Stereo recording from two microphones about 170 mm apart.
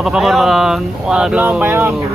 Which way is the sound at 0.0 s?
Centre (ahead or behind).